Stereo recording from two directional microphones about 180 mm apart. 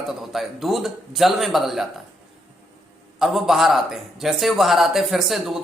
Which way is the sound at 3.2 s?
Centre (ahead or behind).